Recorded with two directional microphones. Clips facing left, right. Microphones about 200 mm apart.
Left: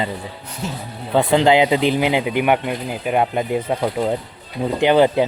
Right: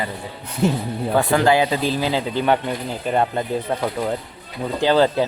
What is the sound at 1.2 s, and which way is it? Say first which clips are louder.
Speech: left 3 dB; 20° left (ahead or behind).